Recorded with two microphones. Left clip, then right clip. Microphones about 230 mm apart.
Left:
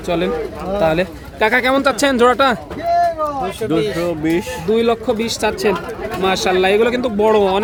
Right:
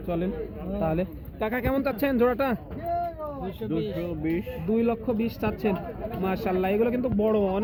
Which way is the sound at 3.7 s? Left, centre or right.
Left.